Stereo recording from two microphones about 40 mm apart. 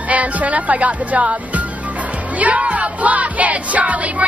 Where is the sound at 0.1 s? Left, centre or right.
Right.